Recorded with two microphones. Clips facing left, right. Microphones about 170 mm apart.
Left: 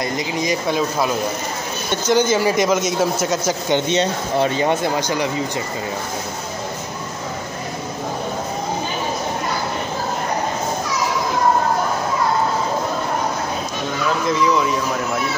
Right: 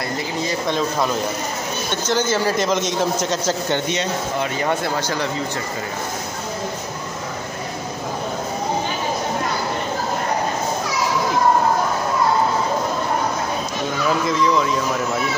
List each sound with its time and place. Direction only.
0.4 s a man's voice: 10° left (ahead or behind)
3.9 s speech: 25° left (ahead or behind)
14.2 s speech: centre (ahead or behind)